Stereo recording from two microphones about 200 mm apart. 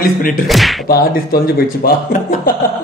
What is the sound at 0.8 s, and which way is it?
A man's voice, 45° left (ahead or behind).